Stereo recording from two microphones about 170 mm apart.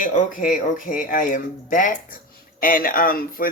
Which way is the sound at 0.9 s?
50° left (ahead or behind).